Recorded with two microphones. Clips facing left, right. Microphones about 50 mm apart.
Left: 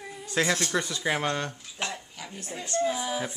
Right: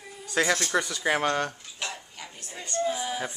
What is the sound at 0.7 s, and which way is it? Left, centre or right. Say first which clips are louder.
Speech: right 2 dB; right.